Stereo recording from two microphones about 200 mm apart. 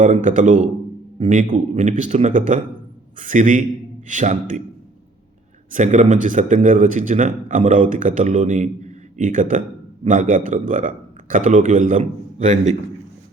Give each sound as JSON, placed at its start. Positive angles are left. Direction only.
{"t": 0.0, "sound": "speech", "side_deg": -40}
{"t": 5.7, "sound": "speech", "side_deg": -35}